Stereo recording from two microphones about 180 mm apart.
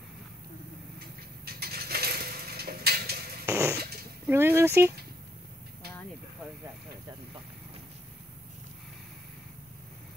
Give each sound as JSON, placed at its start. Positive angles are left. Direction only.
{"t": 0.9, "sound": "coin", "side_deg": -60}
{"t": 3.4, "sound": "fart", "side_deg": -15}
{"t": 4.3, "sound": "speech", "side_deg": -15}